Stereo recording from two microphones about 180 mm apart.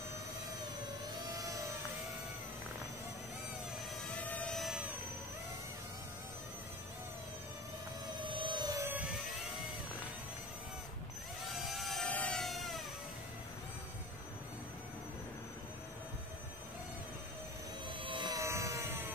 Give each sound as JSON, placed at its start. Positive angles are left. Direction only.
{"t": 4.2, "sound": "vehicle", "side_deg": 10}
{"t": 8.2, "sound": "music", "side_deg": -25}
{"t": 11.4, "sound": "vehicle", "side_deg": 0}
{"t": 18.0, "sound": "a sound", "side_deg": -25}